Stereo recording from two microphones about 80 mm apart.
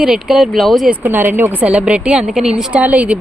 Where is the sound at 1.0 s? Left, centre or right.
Right.